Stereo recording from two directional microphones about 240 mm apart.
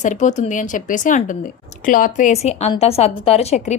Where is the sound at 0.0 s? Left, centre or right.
Left.